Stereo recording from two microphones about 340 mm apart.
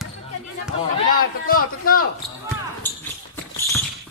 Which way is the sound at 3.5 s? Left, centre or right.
Centre.